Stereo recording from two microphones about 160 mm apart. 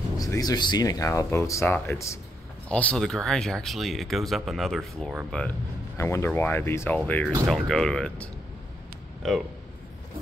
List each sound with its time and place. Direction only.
0.2 s speech: 25° left (ahead or behind); by 5.5 s 5° left (ahead or behind)
5.9 s speech: 15° left (ahead or behind)